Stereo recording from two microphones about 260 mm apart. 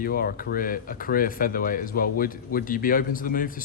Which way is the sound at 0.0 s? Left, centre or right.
Left.